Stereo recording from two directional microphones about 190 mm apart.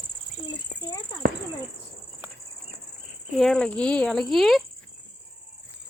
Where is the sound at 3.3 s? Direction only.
5° left (ahead or behind).